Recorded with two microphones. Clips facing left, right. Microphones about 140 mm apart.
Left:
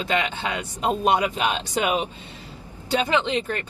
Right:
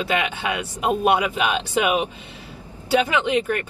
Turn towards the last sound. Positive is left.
turn(degrees=-10)  # may be behind; listen again after turning